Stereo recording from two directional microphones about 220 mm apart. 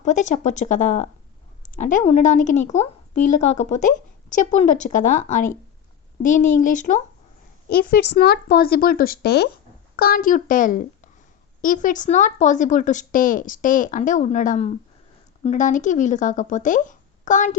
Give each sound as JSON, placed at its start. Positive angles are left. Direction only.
{"t": 0.0, "sound": "a woman's voice", "side_deg": 35}